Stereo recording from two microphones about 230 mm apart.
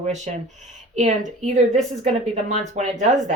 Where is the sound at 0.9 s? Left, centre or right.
Right.